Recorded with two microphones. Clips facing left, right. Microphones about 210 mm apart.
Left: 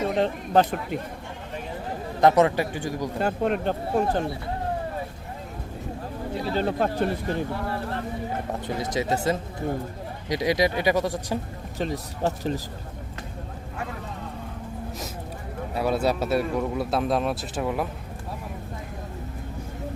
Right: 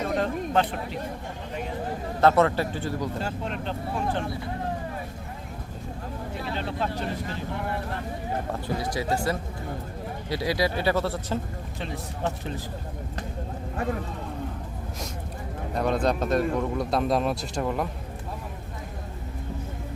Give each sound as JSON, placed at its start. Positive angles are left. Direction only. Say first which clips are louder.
{"t": 0.2, "sound": "speech", "louder": "left 5 dB", "side_deg": 40}
{"t": 2.2, "sound": "speech", "louder": "left 2 dB", "side_deg": 15}
{"t": 3.2, "sound": "speech", "louder": "left 7 dB", "side_deg": 55}
{"t": 6.4, "sound": "speech", "louder": "left 6 dB", "side_deg": 40}
{"t": 8.6, "sound": "speech", "louder": "left 4 dB", "side_deg": 20}
{"t": 15.7, "sound": "speech", "louder": "left 1 dB", "side_deg": 5}